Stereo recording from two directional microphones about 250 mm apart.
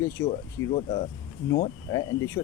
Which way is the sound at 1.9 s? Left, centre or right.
Centre.